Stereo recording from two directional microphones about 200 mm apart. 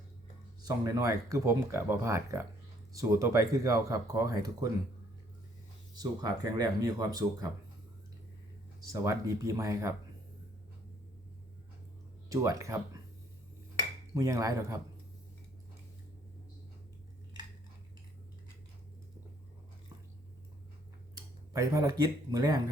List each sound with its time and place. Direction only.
0.6 s speech: 15° right (ahead or behind)
6.0 s speech: 20° right (ahead or behind)
8.9 s speech: 15° right (ahead or behind)
12.3 s speech: 15° right (ahead or behind)
14.1 s speech: 15° right (ahead or behind)
21.5 s speech: 15° right (ahead or behind)